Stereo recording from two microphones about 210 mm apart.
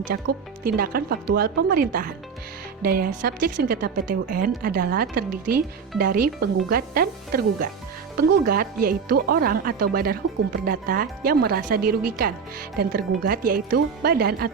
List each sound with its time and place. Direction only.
0.0 s a woman's voice: 45° right (ahead or behind)